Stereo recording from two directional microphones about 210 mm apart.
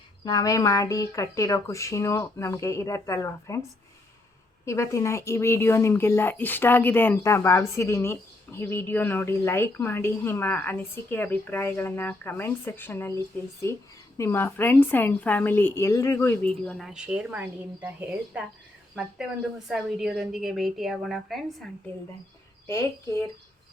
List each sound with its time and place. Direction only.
0.3 s a woman's voice: 15° left (ahead or behind); by 21.7 s centre (ahead or behind)